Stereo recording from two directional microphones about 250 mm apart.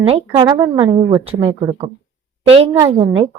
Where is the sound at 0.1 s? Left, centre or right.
Centre.